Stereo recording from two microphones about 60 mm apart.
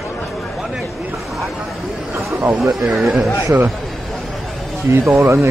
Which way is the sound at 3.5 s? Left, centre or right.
Right.